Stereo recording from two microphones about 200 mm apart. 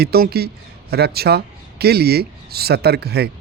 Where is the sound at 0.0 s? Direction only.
50° right (ahead or behind).